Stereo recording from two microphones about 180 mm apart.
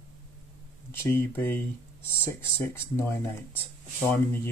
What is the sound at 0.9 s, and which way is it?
Speech, 15° left (ahead or behind).